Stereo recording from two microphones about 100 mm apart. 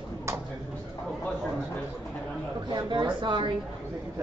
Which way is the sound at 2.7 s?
50° right (ahead or behind).